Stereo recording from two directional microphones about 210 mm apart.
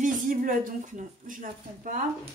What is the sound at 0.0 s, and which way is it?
Speech, 40° right (ahead or behind).